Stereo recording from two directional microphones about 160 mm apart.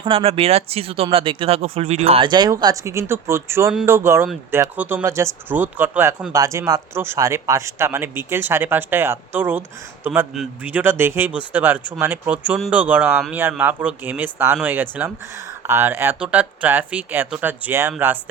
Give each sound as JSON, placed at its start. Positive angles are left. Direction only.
{"t": 0.0, "sound": "speech", "side_deg": -35}